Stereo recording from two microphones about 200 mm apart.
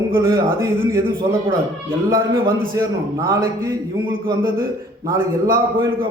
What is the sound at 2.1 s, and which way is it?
Speech, 45° right (ahead or behind).